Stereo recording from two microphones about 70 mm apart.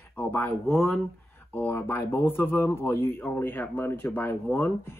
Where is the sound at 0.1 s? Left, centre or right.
Left.